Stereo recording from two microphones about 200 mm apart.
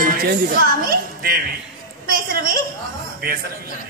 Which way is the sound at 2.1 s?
45° right (ahead or behind).